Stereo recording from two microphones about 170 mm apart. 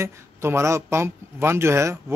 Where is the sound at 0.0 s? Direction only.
15° right (ahead or behind).